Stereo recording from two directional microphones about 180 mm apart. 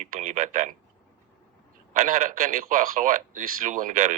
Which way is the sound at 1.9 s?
45° right (ahead or behind).